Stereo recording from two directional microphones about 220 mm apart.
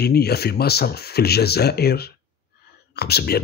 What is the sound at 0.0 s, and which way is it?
Speech, 45° left (ahead or behind).